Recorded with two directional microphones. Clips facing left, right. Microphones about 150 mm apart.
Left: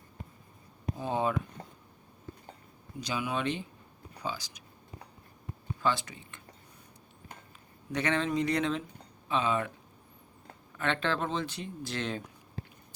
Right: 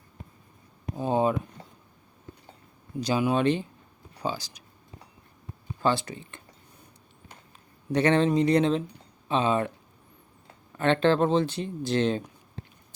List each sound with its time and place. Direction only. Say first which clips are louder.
0.9 s speech: right 6 dB; 20° right (ahead or behind)
3.0 s speech: right 9 dB; 35° right (ahead or behind)
5.8 s speech: right 5 dB; 30° right (ahead or behind)
7.9 s speech: right 8 dB; 30° right (ahead or behind)
10.8 s speech: right 9 dB; 30° right (ahead or behind)